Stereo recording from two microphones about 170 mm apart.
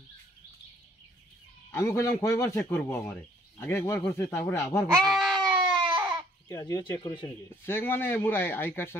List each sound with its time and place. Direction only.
1.7 s speech: 15° left (ahead or behind)
5.0 s a sound: centre (ahead or behind)
5.4 s baby cry: 25° right (ahead or behind)
6.5 s speech: 20° left (ahead or behind)